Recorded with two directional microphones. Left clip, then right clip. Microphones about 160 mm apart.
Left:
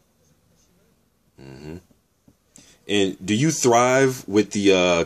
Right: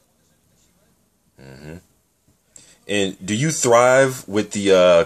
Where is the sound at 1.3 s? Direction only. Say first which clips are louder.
Even; 25° left (ahead or behind).